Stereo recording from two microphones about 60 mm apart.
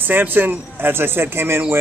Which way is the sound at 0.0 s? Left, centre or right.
Right.